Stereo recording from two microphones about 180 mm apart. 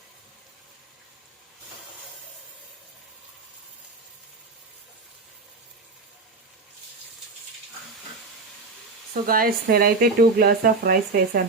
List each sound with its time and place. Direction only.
9.2 s speech: 55° right (ahead or behind)